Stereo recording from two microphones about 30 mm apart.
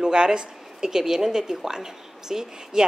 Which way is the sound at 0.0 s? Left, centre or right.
Right.